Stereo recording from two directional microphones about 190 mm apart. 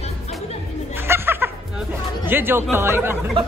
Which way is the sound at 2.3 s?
10° right (ahead or behind).